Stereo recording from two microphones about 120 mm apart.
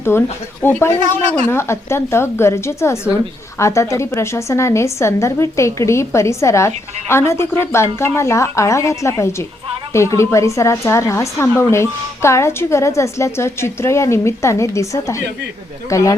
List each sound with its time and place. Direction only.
0.0 s a woman's voice: 20° left (ahead or behind)